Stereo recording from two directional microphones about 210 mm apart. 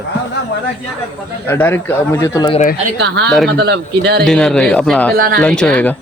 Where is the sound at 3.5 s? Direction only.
50° right (ahead or behind).